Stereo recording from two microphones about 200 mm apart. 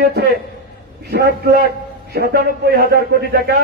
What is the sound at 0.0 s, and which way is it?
A man's voice, 55° right (ahead or behind).